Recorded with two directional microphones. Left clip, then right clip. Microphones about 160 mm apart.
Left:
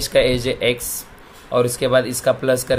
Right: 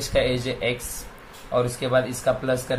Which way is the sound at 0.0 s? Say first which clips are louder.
Left 6 dB; 50° left (ahead or behind).